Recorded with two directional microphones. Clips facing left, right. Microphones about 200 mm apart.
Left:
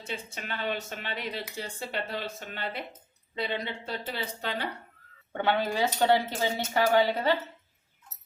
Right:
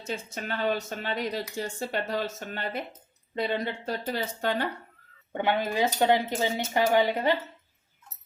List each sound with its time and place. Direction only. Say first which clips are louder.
0.0 s speech: right 4 dB; 40° right (ahead or behind)
5.3 s speech: right 1 dB; 15° right (ahead or behind)